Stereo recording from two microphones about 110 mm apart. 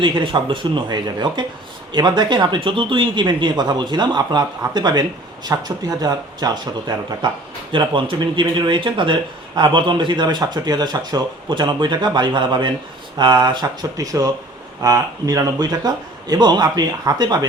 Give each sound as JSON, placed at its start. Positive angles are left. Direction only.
{"t": 0.0, "sound": "speech", "side_deg": -50}